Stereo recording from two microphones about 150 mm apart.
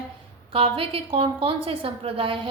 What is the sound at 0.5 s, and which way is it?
A woman's voice, 40° right (ahead or behind).